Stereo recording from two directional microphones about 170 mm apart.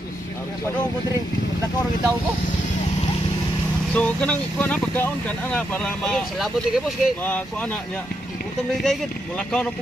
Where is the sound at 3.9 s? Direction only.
5° left (ahead or behind).